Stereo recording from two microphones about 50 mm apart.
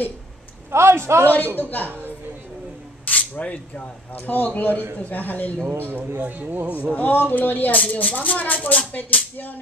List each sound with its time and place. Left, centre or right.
0.7 s a man's voice: right
1.2 s speech: left
3.1 s speech: left
5.7 s speech: right
6.2 s speech: right
6.8 s speech: left